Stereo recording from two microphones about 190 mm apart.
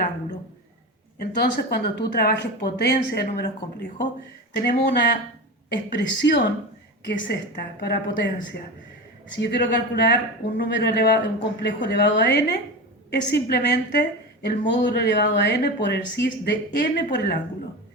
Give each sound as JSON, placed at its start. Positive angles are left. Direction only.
{"t": 1.2, "sound": "a woman's voice", "side_deg": 55}
{"t": 9.4, "sound": "a woman's voice", "side_deg": 60}